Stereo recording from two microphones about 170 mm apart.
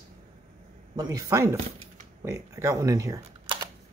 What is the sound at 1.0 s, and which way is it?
Speech, 20° right (ahead or behind).